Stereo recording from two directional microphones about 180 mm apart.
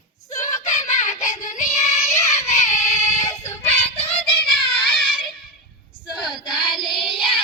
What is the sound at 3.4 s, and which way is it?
Child singing, 35° left (ahead or behind).